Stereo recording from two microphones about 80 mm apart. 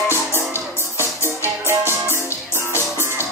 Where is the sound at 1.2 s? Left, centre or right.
Right.